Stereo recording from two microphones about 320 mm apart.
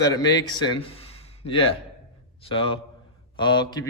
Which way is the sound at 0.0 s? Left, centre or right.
Centre.